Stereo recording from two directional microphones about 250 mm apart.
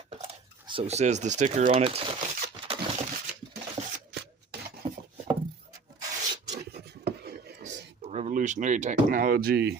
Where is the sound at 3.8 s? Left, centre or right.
Right.